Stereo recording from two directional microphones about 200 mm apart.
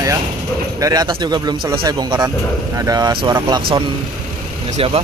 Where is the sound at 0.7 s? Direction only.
15° right (ahead or behind).